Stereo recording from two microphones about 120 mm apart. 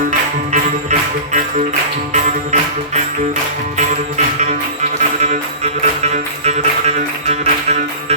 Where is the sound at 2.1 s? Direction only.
75° right (ahead or behind).